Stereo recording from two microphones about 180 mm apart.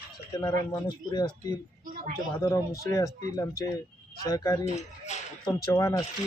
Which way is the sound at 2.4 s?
15° left (ahead or behind).